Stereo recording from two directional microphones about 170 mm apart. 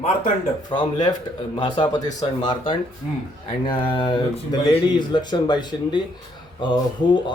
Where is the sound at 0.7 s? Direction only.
30° left (ahead or behind).